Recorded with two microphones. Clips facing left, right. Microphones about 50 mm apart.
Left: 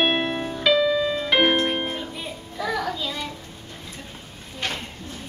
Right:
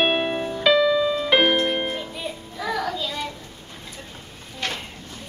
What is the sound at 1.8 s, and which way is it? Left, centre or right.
Music, centre.